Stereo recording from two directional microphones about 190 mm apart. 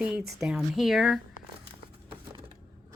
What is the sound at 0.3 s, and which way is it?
Speech, centre (ahead or behind).